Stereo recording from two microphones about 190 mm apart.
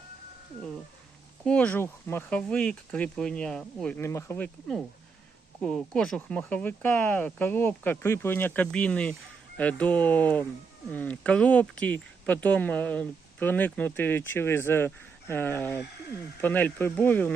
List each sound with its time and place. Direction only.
1.5 s speech: 5° left (ahead or behind)